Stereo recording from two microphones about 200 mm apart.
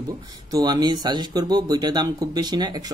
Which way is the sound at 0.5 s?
20° right (ahead or behind).